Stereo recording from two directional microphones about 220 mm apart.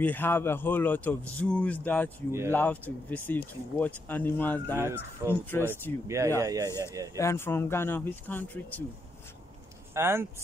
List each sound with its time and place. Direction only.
0.0 s speech: 10° left (ahead or behind)
4.7 s speech: 10° right (ahead or behind)
5.5 s speech: 10° left (ahead or behind)
6.0 s speech: 15° right (ahead or behind)
7.2 s speech: 10° left (ahead or behind)
9.9 s speech: 10° right (ahead or behind)